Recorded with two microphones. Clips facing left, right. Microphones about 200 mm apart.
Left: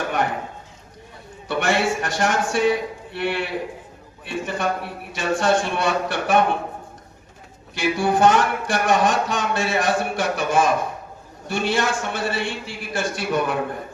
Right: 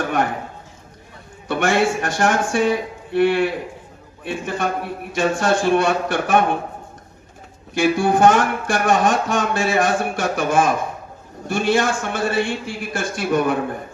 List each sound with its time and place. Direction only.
1.5 s speech: 50° right (ahead or behind)
7.7 s speech: 50° right (ahead or behind)